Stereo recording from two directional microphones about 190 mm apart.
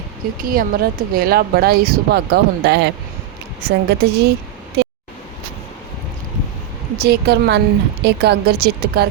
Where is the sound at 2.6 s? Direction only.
65° right (ahead or behind).